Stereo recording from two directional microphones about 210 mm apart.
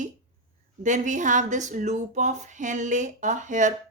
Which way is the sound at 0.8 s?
35° right (ahead or behind).